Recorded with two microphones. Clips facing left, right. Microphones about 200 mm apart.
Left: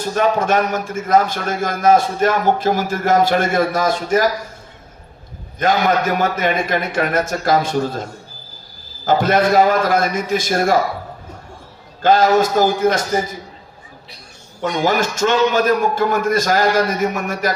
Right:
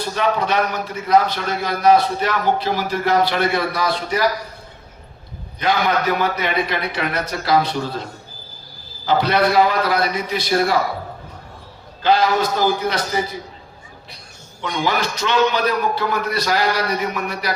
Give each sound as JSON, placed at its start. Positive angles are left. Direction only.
{"t": 0.0, "sound": "a man's voice", "side_deg": 45}
{"t": 5.5, "sound": "a man's voice", "side_deg": 45}
{"t": 9.0, "sound": "a man's voice", "side_deg": 45}
{"t": 12.0, "sound": "a man's voice", "side_deg": 45}
{"t": 14.6, "sound": "a man's voice", "side_deg": 45}